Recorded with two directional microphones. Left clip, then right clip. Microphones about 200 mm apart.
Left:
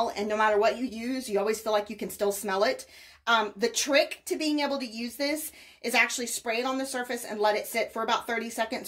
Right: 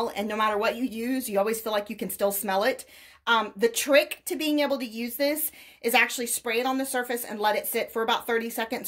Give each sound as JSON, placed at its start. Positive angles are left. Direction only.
{"t": 0.0, "sound": "a woman's voice", "side_deg": -40}